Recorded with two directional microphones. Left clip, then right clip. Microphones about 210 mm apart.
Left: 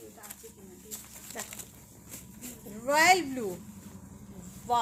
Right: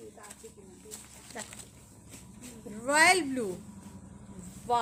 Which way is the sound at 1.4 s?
20° right (ahead or behind).